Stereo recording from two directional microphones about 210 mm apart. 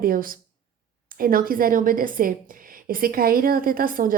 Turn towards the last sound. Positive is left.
turn(degrees=-40)  # may be behind; listen again after turning